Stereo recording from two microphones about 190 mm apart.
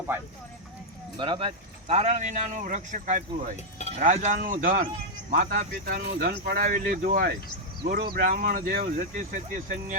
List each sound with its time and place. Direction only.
1.2 s speech: 25° right (ahead or behind); by 9.6 s 45° right (ahead or behind)